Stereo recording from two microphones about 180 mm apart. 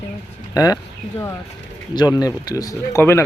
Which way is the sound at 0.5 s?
20° left (ahead or behind).